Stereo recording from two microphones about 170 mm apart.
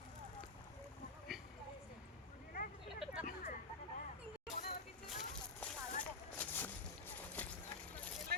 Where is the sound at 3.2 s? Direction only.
50° left (ahead or behind).